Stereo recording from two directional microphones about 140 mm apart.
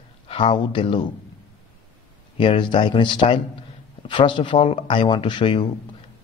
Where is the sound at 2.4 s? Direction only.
35° left (ahead or behind).